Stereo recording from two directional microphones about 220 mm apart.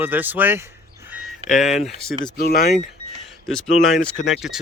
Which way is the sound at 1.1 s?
5° right (ahead or behind).